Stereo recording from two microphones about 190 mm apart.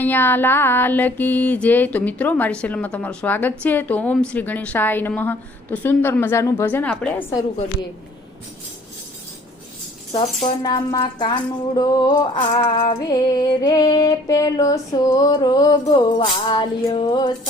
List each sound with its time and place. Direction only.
0.0 s a woman's voice: 10° left (ahead or behind)
10.1 s speech: 35° left (ahead or behind)
10.6 s music: 20° left (ahead or behind)